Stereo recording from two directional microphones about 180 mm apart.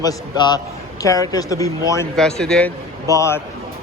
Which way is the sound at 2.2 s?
5° left (ahead or behind).